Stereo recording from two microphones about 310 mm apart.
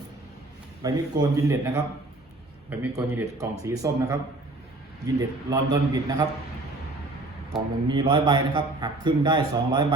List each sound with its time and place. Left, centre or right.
0.8 s a man's voice: centre
7.5 s a man's voice: centre